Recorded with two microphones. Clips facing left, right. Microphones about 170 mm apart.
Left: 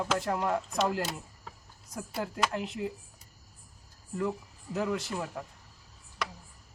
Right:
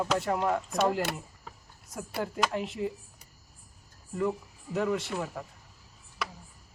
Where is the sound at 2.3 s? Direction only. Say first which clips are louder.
Right 1 dB; centre (ahead or behind).